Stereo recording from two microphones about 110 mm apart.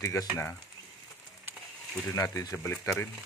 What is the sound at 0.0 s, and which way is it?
Speech, 25° left (ahead or behind).